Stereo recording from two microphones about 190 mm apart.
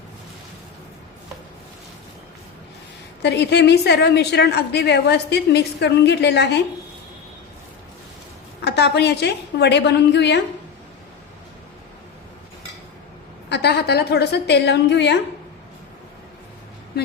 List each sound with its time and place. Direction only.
3.2 s a woman's voice: 60° left (ahead or behind)
8.6 s a woman's voice: 60° left (ahead or behind)
13.5 s a woman's voice: 60° left (ahead or behind)